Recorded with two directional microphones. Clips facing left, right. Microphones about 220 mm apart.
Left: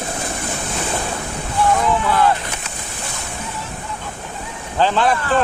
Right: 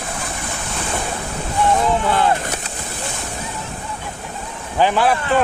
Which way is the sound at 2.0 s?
25° right (ahead or behind).